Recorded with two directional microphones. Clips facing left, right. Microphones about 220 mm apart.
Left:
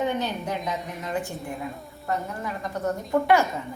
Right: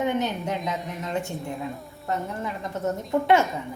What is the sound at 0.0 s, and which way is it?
Speech, 20° right (ahead or behind).